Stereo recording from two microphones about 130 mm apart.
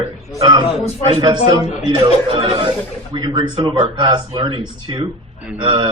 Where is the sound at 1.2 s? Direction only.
30° right (ahead or behind).